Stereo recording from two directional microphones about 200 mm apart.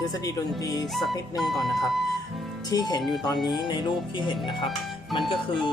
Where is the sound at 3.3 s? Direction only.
Centre (ahead or behind).